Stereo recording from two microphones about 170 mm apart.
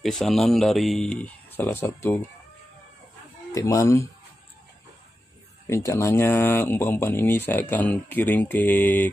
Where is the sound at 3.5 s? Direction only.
20° left (ahead or behind).